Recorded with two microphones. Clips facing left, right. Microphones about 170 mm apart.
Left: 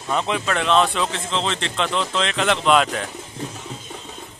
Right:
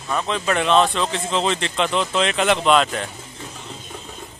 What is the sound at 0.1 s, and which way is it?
Speech, 20° left (ahead or behind).